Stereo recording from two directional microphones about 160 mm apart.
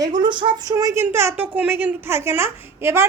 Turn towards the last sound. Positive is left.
turn(degrees=-15)  # may be behind; listen again after turning